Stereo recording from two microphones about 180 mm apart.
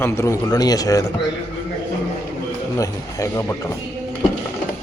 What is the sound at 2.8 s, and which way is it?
Speech, 15° left (ahead or behind).